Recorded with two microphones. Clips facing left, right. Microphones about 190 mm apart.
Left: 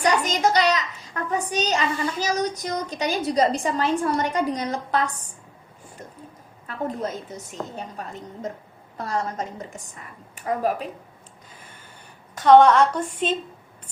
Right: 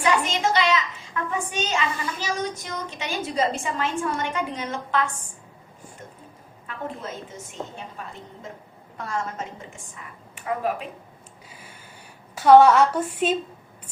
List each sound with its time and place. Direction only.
0.0 s a child's voice: 40° left (ahead or behind)
6.7 s a child's voice: 40° left (ahead or behind)
11.4 s a sound: 10° right (ahead or behind)
12.3 s a woman's voice: 5° right (ahead or behind)